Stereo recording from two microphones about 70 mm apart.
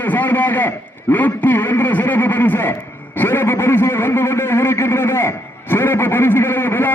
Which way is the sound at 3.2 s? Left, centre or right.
Left.